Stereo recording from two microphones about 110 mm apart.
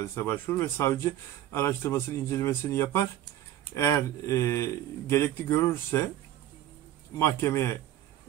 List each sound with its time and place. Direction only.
0.0 s speech: 25° left (ahead or behind)
7.2 s speech: 25° left (ahead or behind)